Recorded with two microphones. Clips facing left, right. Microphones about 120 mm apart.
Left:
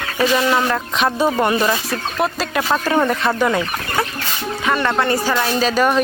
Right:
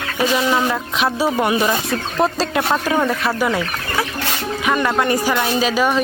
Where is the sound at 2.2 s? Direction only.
30° right (ahead or behind).